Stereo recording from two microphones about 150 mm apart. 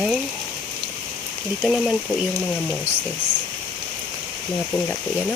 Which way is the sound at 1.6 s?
5° right (ahead or behind).